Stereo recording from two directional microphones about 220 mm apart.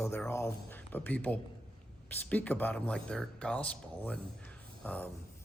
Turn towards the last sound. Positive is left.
turn(degrees=5)  # may be behind; listen again after turning